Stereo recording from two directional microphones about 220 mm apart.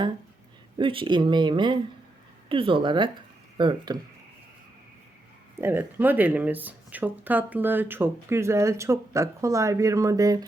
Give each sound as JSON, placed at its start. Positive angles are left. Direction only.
{"t": 0.8, "sound": "speech", "side_deg": -25}
{"t": 5.5, "sound": "speech", "side_deg": -10}